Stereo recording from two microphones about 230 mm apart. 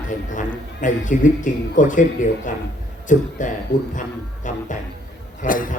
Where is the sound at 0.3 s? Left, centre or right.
Left.